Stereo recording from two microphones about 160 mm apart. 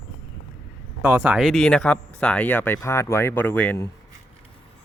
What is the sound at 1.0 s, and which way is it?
Speech, 15° right (ahead or behind).